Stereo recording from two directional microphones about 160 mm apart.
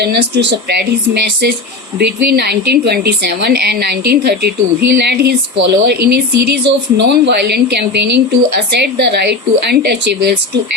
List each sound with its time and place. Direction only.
0.0 s speech: 90° right